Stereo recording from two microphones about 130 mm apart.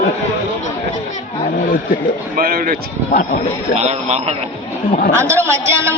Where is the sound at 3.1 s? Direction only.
90° left.